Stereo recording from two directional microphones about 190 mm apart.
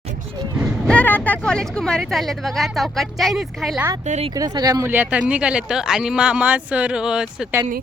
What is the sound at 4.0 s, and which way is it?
Speech, 35° right (ahead or behind).